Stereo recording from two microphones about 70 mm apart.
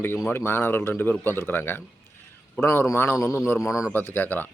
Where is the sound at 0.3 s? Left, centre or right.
Left.